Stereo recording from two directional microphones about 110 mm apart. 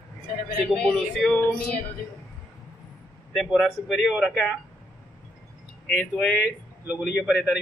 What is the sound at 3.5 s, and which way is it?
Speech, 5° left (ahead or behind).